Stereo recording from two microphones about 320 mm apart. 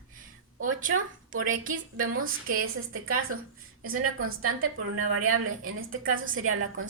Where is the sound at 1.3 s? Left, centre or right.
Right.